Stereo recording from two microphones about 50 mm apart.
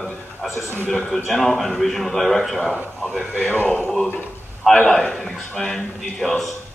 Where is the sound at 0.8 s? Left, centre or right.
Centre.